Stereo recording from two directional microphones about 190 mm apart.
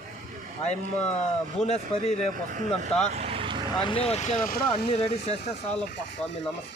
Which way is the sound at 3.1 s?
30° right (ahead or behind).